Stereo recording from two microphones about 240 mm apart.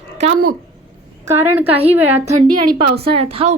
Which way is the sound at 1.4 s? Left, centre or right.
Centre.